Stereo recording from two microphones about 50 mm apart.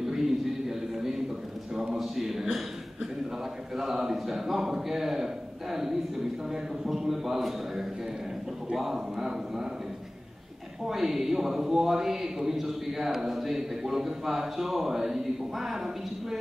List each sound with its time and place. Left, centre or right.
0.0 s a sound: centre
3.7 s a man's voice: centre
10.9 s a man's voice: centre